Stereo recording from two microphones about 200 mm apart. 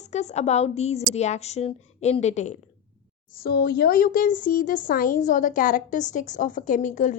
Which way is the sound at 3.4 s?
50° left (ahead or behind).